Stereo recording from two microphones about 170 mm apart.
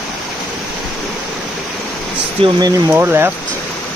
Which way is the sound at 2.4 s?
35° right (ahead or behind).